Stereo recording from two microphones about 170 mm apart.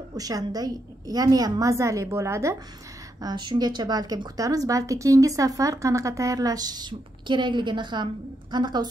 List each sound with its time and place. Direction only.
0.1 s a woman's voice: 20° right (ahead or behind)